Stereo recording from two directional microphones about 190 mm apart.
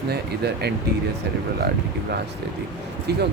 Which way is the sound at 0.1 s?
60° right (ahead or behind).